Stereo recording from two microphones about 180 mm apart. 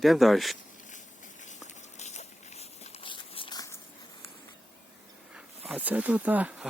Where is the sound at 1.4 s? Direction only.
40° left (ahead or behind); by 3.7 s 20° left (ahead or behind).